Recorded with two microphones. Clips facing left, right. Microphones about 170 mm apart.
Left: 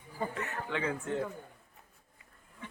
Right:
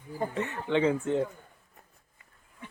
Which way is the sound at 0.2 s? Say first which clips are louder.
Right 4 dB; 25° right (ahead or behind).